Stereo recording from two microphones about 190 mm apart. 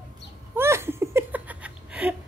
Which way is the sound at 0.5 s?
15° right (ahead or behind).